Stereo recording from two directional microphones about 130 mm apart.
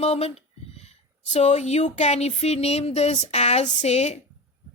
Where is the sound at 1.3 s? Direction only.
60° left (ahead or behind).